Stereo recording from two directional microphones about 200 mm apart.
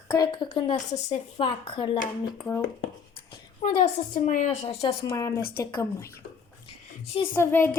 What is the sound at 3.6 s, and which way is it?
A woman's voice, 35° left (ahead or behind).